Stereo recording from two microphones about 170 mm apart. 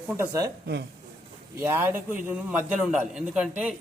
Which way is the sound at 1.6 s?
10° right (ahead or behind).